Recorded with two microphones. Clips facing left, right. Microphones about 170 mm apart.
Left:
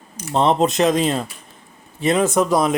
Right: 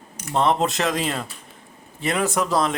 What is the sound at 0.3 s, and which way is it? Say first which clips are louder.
Speech: left 4 dB; 20° left (ahead or behind).